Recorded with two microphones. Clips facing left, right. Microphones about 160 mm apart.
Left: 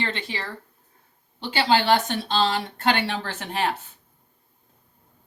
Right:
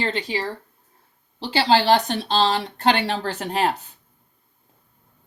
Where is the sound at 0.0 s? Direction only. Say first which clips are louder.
Right 5 dB; 35° right (ahead or behind).